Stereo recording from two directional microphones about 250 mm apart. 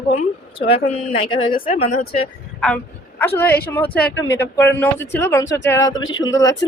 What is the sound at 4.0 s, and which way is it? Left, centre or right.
Speech, left.